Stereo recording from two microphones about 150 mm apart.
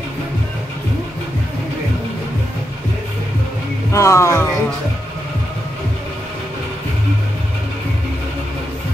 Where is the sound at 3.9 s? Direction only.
20° left (ahead or behind).